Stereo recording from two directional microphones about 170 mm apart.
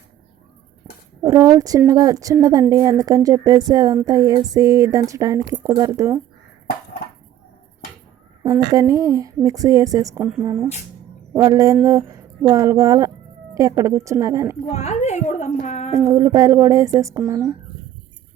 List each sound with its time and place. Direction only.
1.2 s speech: 20° right (ahead or behind)
8.4 s speech: 20° right (ahead or behind)
14.7 s a sound: 40° left (ahead or behind)
16.0 s speech: 15° right (ahead or behind)